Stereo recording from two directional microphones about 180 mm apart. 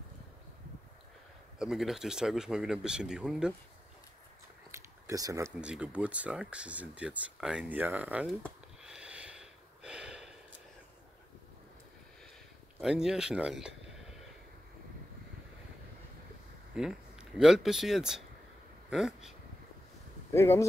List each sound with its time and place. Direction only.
1.6 s speech: centre (ahead or behind)
4.6 s a sound: 15° right (ahead or behind)
5.6 s speech: 5° right (ahead or behind)
8.8 s a sound: 5° right (ahead or behind)
12.8 s speech: 5° right (ahead or behind)
16.7 s speech: 5° right (ahead or behind)
20.3 s speech: 15° left (ahead or behind)